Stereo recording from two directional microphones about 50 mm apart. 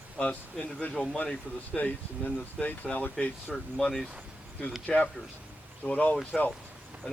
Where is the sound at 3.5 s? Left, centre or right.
Centre.